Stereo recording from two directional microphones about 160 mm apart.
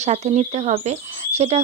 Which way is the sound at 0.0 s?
45° right (ahead or behind).